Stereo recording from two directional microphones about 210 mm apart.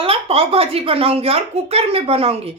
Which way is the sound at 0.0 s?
25° right (ahead or behind).